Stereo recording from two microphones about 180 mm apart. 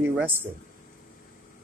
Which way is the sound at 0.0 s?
10° right (ahead or behind).